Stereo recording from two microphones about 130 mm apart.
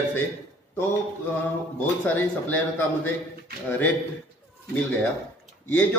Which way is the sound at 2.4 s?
15° left (ahead or behind).